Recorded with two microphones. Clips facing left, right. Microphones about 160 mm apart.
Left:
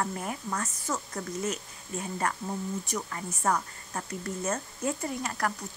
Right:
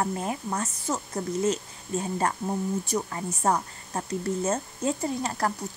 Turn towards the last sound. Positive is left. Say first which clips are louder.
# right 4 dB
turn(degrees=-30)  # may be behind; listen again after turning